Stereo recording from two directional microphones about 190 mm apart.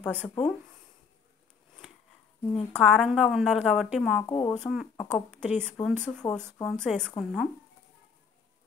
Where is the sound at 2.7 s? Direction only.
5° left (ahead or behind).